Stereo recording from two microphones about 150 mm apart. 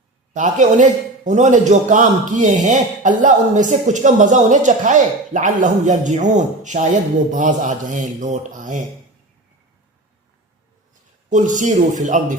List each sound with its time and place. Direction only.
0.3 s a man's voice: 55° right (ahead or behind)
11.3 s a man's voice: 55° right (ahead or behind)